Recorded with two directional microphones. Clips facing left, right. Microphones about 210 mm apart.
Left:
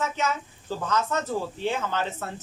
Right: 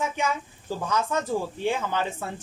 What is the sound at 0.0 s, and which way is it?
Speech, 10° right (ahead or behind).